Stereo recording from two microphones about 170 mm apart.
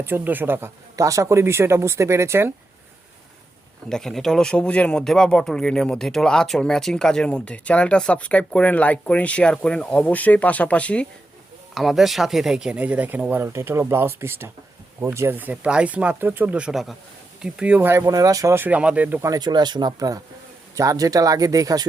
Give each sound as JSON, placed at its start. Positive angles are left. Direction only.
{"t": 0.0, "sound": "speech", "side_deg": -10}
{"t": 3.8, "sound": "speech", "side_deg": 5}
{"t": 19.3, "sound": "speech", "side_deg": -25}